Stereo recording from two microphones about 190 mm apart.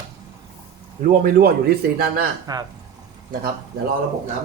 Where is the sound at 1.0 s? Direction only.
45° right (ahead or behind).